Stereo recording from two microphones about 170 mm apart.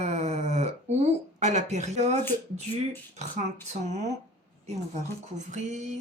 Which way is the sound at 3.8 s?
45° right (ahead or behind).